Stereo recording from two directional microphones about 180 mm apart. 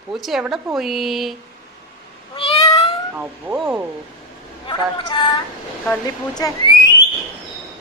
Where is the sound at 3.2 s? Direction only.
10° right (ahead or behind).